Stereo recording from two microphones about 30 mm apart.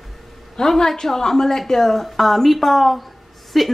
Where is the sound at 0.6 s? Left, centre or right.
Centre.